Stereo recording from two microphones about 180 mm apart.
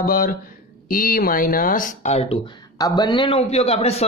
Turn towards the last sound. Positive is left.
turn(degrees=35)  # may be behind; listen again after turning